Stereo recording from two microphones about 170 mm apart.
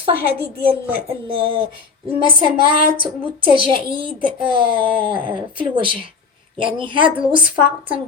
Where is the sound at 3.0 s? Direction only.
30° right (ahead or behind).